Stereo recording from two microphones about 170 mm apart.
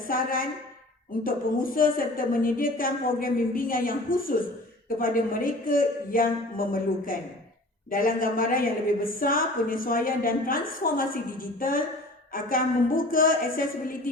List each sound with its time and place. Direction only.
0.1 s a woman's voice: 55° left (ahead or behind)